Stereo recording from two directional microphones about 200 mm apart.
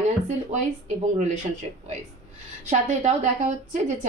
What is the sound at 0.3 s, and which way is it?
Speech, 35° right (ahead or behind).